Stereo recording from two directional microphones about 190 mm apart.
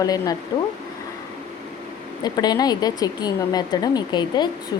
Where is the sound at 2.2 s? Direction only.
20° left (ahead or behind).